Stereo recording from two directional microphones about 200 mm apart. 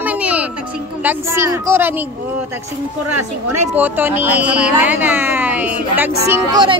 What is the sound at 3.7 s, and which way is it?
Speech, 10° right (ahead or behind).